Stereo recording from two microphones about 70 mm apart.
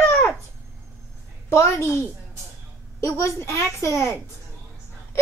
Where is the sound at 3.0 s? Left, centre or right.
Left.